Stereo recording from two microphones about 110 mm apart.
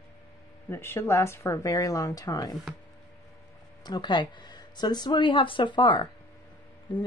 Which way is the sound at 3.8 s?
40° left (ahead or behind).